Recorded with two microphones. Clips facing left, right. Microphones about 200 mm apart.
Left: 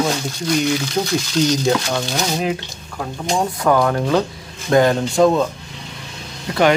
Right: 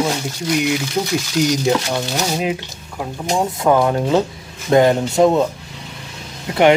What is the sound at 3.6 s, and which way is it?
Speech, 25° right (ahead or behind).